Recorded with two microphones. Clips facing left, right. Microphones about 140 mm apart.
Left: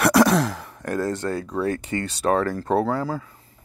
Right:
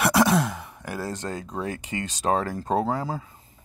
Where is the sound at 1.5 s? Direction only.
15° right (ahead or behind).